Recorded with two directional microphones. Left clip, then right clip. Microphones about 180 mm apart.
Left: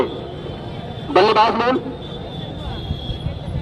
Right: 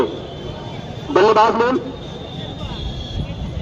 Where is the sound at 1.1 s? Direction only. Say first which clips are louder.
Right 1 dB; 20° left (ahead or behind).